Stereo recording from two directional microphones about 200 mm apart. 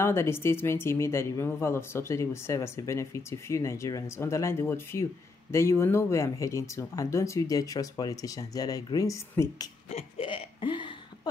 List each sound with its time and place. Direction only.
0.0 s speech: 10° left (ahead or behind)
9.8 s hiccup: 30° left (ahead or behind)